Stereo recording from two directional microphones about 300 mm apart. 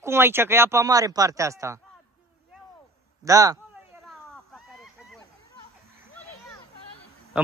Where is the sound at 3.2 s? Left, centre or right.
Centre.